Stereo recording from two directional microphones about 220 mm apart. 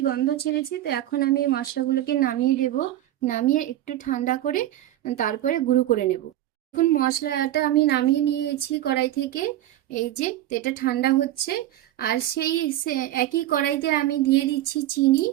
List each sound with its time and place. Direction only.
0.0 s a woman's voice: 45° left (ahead or behind)
10.0 s a woman's voice: 35° left (ahead or behind)